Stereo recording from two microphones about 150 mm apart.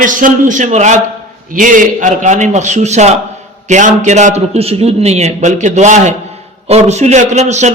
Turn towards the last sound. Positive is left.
turn(degrees=-50)  # may be behind; listen again after turning